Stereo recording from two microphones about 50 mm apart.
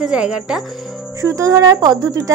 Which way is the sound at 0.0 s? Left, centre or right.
Centre.